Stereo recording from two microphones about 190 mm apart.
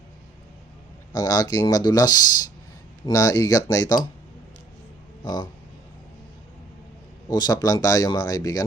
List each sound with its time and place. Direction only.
1.1 s speech: 20° left (ahead or behind)
5.2 s speech: 20° left (ahead or behind)
7.3 s speech: 20° left (ahead or behind)